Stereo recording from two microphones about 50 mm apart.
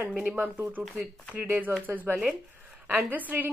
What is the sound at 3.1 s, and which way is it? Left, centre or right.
Speech, right.